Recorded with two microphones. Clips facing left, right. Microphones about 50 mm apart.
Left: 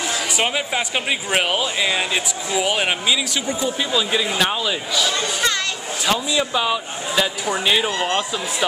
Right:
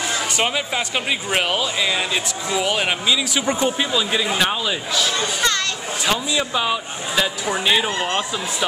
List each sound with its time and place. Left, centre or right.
1.3 s speech: centre
3.9 s speech: centre